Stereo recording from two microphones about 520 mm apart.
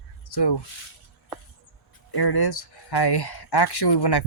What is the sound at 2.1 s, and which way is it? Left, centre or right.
Speech, left.